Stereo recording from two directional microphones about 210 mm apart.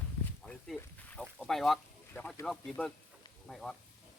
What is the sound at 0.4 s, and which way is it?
Boat, 5° left (ahead or behind).